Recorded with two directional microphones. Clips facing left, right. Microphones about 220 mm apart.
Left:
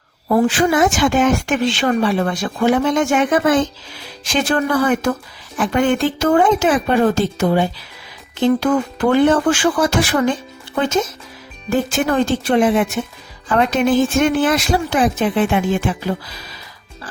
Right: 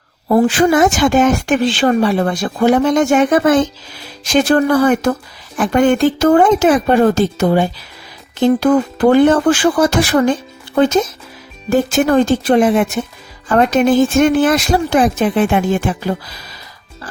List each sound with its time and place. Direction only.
0.3 s a woman's voice: 45° right (ahead or behind)